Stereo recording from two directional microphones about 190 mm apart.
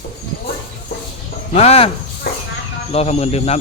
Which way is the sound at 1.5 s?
30° left (ahead or behind).